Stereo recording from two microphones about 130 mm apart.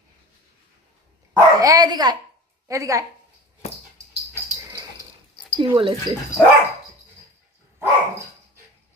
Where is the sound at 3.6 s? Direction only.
55° left (ahead or behind).